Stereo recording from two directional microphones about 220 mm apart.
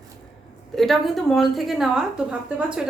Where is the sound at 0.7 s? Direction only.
Centre (ahead or behind).